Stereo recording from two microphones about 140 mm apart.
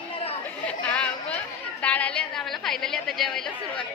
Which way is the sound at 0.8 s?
10° left (ahead or behind).